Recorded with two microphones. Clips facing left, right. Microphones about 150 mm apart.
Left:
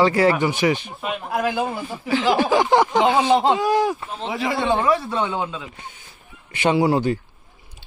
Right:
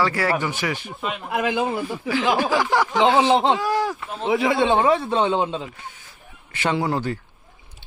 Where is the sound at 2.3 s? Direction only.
20° left (ahead or behind).